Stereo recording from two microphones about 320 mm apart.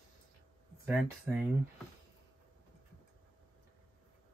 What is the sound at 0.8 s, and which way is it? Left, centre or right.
Speech, centre.